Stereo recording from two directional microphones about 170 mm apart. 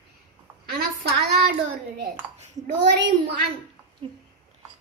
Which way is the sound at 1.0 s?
70° right (ahead or behind).